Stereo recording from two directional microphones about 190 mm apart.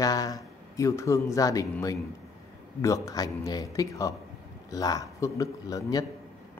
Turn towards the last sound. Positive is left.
turn(degrees=20)  # may be behind; listen again after turning